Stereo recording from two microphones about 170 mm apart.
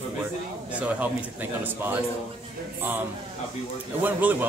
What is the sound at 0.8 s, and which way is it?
Speech, 10° right (ahead or behind).